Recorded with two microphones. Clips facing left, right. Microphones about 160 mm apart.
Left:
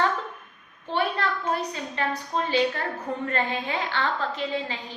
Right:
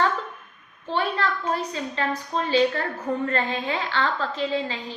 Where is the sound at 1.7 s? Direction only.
15° left (ahead or behind).